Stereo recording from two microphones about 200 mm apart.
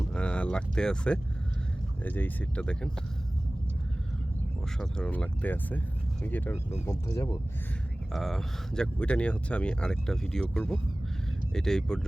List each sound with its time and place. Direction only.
0.1 s speech: 5° left (ahead or behind)
4.8 s speech: 5° left (ahead or behind)
8.1 s speech: centre (ahead or behind)